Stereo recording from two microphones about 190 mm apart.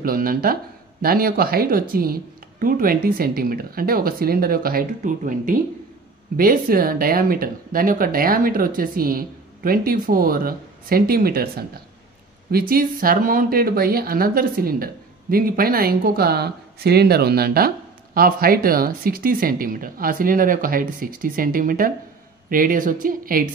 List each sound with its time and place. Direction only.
0.0 s speech: 50° right (ahead or behind)